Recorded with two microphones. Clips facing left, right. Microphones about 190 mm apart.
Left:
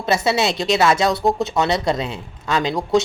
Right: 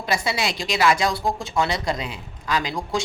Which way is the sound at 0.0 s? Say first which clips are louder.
Left 6 dB; 25° left (ahead or behind).